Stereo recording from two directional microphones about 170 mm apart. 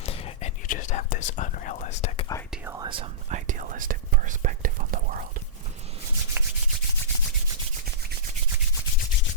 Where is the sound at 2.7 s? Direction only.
25° right (ahead or behind).